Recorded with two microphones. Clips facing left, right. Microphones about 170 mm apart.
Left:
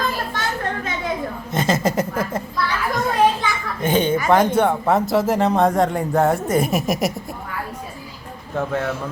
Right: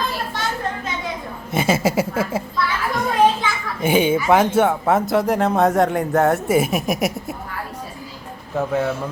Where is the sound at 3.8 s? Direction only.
10° right (ahead or behind).